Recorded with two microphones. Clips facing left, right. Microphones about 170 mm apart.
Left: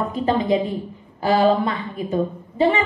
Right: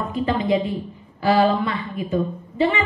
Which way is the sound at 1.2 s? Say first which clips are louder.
Left 1 dB; 40° left (ahead or behind).